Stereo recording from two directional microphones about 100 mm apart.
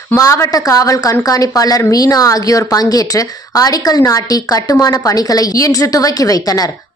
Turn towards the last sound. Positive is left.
turn(degrees=35)  # may be behind; listen again after turning